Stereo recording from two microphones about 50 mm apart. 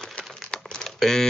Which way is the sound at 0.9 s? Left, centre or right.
Centre.